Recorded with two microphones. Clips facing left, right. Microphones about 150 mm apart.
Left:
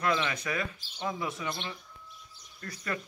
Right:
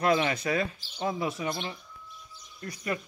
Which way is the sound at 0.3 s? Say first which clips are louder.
Right 5 dB; 30° right (ahead or behind).